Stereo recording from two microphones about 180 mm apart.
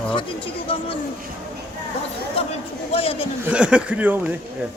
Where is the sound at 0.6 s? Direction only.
30° left (ahead or behind).